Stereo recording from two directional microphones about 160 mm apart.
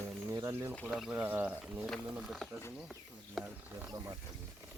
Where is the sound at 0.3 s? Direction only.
20° right (ahead or behind).